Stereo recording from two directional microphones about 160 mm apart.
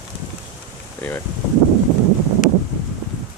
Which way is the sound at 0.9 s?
15° left (ahead or behind).